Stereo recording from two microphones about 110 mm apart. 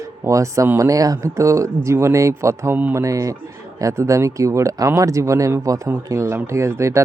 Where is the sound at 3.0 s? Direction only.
30° right (ahead or behind).